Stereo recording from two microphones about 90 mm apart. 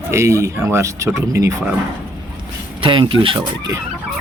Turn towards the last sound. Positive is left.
turn(degrees=-75)  # may be behind; listen again after turning